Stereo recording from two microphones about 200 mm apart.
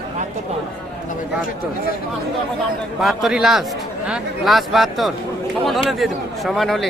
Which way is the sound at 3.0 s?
Centre (ahead or behind).